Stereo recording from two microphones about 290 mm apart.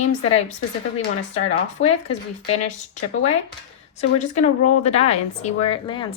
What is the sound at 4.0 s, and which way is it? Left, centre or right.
Speech, left.